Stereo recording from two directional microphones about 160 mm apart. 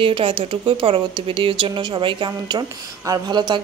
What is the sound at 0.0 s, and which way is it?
Speech, 35° right (ahead or behind).